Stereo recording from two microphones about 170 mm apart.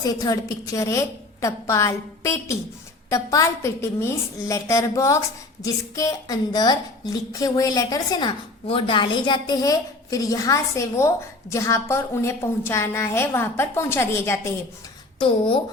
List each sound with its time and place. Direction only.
0.0 s a woman's voice: 20° left (ahead or behind)